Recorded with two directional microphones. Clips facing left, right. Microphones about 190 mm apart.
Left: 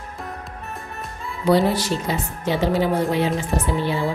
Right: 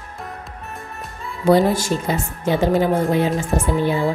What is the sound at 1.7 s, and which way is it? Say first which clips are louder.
A woman's voice: right 2 dB; 50° right (ahead or behind).